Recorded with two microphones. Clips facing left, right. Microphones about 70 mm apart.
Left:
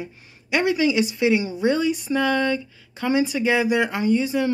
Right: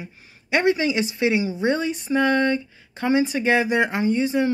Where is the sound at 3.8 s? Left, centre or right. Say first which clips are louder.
Even; right.